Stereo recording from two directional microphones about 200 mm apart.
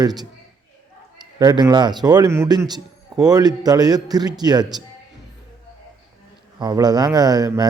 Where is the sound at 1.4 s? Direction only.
20° right (ahead or behind).